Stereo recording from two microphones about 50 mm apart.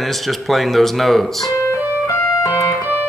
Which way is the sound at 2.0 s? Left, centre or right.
Left.